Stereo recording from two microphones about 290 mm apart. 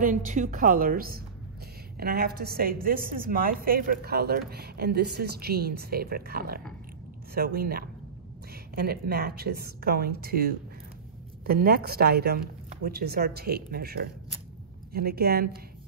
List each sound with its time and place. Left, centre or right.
0.0 s a woman's voice: right